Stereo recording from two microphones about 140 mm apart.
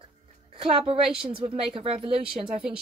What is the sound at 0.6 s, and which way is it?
A woman's voice, 40° right (ahead or behind).